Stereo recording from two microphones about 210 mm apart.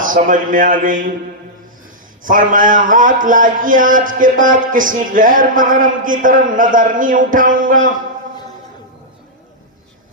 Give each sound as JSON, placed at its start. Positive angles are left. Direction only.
{"t": 0.0, "sound": "a man's voice", "side_deg": -40}
{"t": 2.2, "sound": "a man's voice", "side_deg": -40}